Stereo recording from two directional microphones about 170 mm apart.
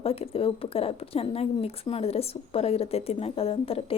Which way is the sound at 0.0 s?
35° left (ahead or behind).